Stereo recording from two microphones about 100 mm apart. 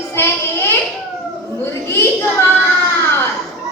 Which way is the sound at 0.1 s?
25° left (ahead or behind).